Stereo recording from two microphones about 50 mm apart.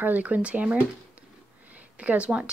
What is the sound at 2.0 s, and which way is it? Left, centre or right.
Speech, right.